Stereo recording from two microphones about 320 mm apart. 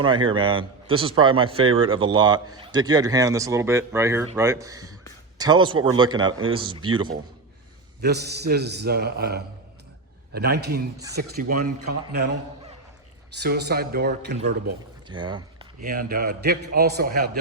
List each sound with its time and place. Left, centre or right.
0.3 s speech: centre
8.0 s a man's voice: right
13.3 s a man's voice: right
15.0 s pour: centre
15.8 s a man's voice: right